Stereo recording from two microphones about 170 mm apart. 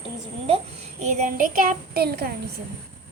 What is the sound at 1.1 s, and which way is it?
Child singing, 50° right (ahead or behind).